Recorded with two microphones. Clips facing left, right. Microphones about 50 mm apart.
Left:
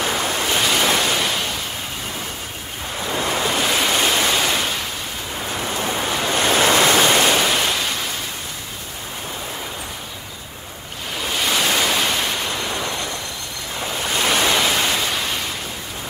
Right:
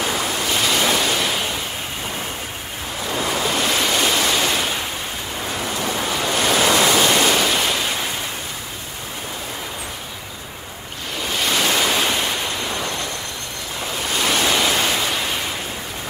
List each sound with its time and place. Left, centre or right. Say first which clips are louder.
0.6 s waves: even; centre
3.1 s waves: even; centre
5.7 s waves: left 1 dB; centre
5.9 s waves: even; centre
6.6 s waves: left 1 dB; left
7.2 s waves: even; centre
11.1 s waves: even; centre
14.1 s waves: left 1 dB; centre